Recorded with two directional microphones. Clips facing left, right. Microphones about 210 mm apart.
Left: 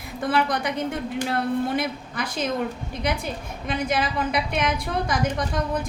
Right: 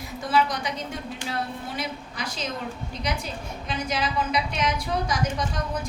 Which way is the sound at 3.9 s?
55° left (ahead or behind).